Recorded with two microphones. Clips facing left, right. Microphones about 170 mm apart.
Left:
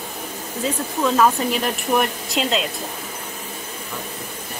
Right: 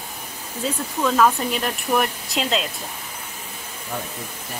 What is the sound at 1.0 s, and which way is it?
Speech, 5° left (ahead or behind).